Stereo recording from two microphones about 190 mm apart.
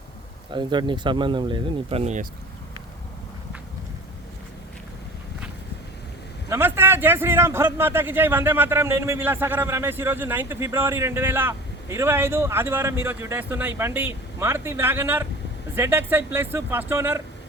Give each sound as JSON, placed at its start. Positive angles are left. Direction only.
{"t": 0.5, "sound": "speech", "side_deg": -25}
{"t": 6.5, "sound": "speech", "side_deg": -10}